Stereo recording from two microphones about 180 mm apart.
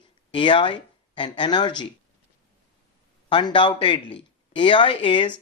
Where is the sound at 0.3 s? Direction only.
25° left (ahead or behind).